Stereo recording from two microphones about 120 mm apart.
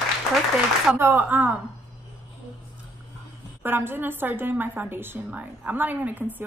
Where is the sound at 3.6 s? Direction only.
20° right (ahead or behind).